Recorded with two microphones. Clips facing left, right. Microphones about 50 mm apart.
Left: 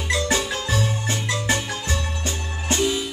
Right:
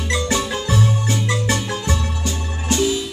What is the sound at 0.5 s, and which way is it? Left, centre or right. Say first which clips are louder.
Music: right 4 dB; centre.